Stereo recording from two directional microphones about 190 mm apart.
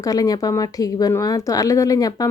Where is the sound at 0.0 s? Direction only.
20° left (ahead or behind).